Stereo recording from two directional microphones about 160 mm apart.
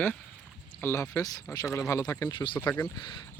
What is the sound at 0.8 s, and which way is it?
Speech, 15° left (ahead or behind).